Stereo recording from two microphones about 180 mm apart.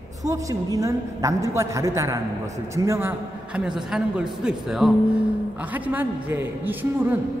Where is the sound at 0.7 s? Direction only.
15° right (ahead or behind).